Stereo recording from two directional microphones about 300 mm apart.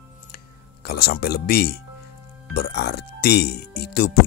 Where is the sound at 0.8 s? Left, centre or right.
Left.